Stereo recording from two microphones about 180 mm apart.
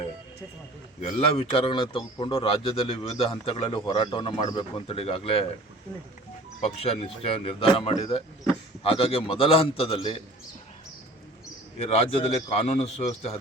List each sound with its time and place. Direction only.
1.1 s a man's voice: 30° left (ahead or behind)
6.7 s a man's voice: 35° left (ahead or behind)
11.8 s a man's voice: 35° left (ahead or behind)